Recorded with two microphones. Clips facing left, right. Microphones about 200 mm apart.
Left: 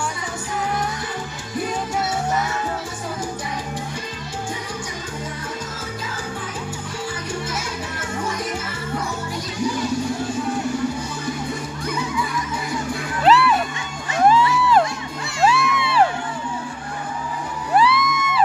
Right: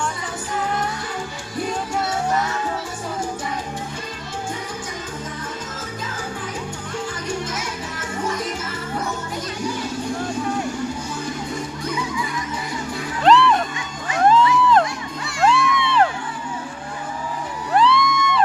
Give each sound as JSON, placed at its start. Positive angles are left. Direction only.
{"t": 13.2, "sound": "music", "side_deg": 5}
{"t": 17.7, "sound": "music", "side_deg": 5}